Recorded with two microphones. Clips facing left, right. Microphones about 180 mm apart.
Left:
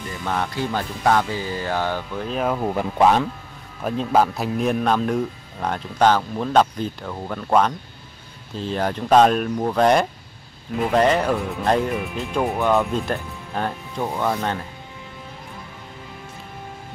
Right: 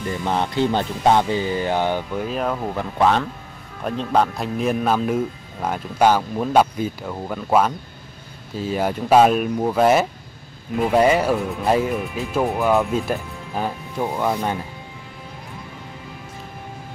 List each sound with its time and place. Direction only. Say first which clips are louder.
0.2 s speech: right 3 dB; 25° right (ahead or behind)
2.2 s speech: left 5 dB; centre (ahead or behind)